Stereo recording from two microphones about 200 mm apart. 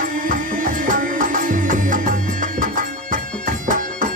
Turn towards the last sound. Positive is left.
turn(degrees=-40)  # may be behind; listen again after turning